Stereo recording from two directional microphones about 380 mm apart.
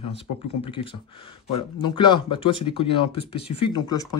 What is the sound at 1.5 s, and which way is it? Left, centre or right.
Speech, centre.